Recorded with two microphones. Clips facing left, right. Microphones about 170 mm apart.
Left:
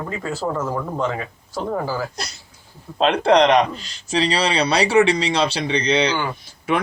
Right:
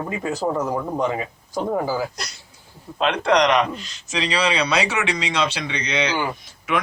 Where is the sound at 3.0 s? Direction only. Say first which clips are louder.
Left 3 dB; 30° left (ahead or behind).